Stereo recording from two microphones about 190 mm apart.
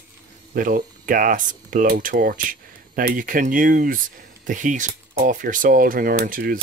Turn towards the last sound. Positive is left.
turn(degrees=-50)  # may be behind; listen again after turning